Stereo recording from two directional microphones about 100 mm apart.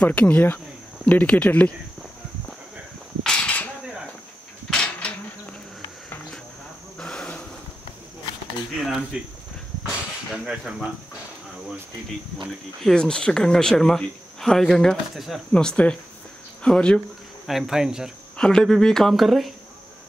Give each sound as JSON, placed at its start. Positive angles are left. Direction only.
{"t": 0.0, "sound": "speech", "side_deg": 15}
{"t": 3.3, "sound": "a sound", "side_deg": 10}
{"t": 4.6, "sound": "a sound", "side_deg": 10}
{"t": 7.0, "sound": "insect", "side_deg": 10}
{"t": 8.7, "sound": "speech", "side_deg": 0}
{"t": 10.3, "sound": "speech", "side_deg": -5}
{"t": 12.8, "sound": "speech", "side_deg": 10}
{"t": 17.5, "sound": "speech", "side_deg": -5}
{"t": 18.4, "sound": "speech", "side_deg": 5}